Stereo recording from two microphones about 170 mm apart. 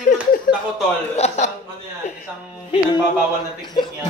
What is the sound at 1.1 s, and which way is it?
Speech, 40° left (ahead or behind).